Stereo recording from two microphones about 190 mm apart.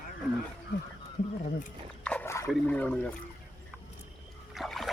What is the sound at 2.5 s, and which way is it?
Speech, 5° left (ahead or behind).